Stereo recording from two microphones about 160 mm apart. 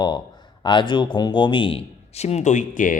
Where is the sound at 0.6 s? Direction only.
30° left (ahead or behind).